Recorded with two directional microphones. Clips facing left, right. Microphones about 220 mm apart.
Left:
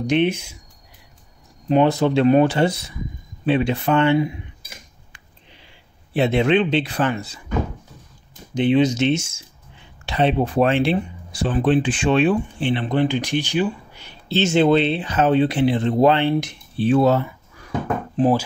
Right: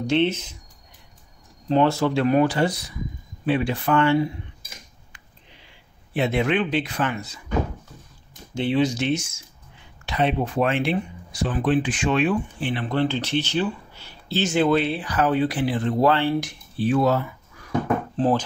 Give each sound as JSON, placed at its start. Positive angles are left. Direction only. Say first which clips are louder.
{"t": 0.0, "sound": "speech", "louder": "left 2 dB", "side_deg": 15}
{"t": 1.7, "sound": "speech", "louder": "left 3 dB", "side_deg": 15}
{"t": 6.1, "sound": "speech", "louder": "left 4 dB", "side_deg": 30}
{"t": 8.5, "sound": "speech", "louder": "left 5 dB", "side_deg": 20}
{"t": 18.1, "sound": "speech", "louder": "left 4 dB", "side_deg": 15}